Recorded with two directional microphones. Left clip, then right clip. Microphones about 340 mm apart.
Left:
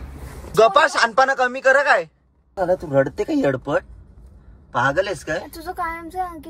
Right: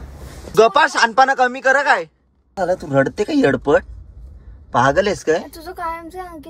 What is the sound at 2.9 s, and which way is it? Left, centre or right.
Speech, right.